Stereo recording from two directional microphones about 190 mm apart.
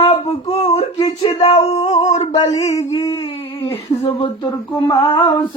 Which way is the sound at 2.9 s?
20° left (ahead or behind).